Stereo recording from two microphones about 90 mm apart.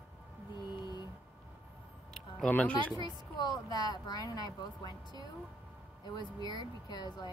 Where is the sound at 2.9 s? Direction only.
50° left (ahead or behind).